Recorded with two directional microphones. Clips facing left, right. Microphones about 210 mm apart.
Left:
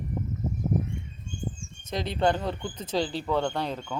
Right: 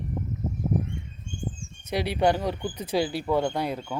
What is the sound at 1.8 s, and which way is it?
Speech, 10° right (ahead or behind).